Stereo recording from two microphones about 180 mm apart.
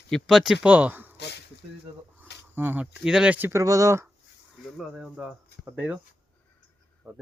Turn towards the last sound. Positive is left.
turn(degrees=-5)  # may be behind; listen again after turning